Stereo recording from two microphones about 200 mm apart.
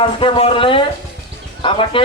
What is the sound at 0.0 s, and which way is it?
Speech, 25° left (ahead or behind).